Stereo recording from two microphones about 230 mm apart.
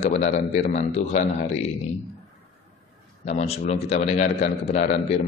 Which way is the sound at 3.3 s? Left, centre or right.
Left.